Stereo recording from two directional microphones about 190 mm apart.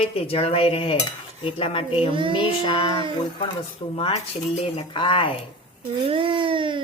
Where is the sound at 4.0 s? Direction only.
30° left (ahead or behind).